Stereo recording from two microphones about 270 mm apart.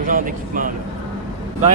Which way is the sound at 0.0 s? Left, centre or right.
Right.